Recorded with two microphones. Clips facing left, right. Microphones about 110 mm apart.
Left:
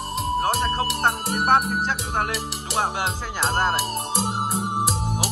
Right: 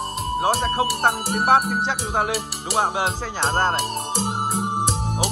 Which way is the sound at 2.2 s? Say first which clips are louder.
Right 4 dB; 5° right (ahead or behind).